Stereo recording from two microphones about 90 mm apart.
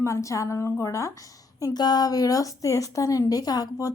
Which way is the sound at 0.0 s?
35° left (ahead or behind).